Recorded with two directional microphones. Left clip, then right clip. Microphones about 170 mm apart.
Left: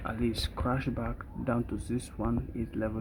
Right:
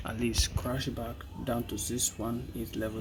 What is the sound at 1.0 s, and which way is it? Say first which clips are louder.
Speech: left 2 dB; 15° left (ahead or behind).